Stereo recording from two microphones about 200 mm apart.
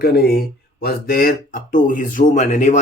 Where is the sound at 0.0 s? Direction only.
50° left (ahead or behind).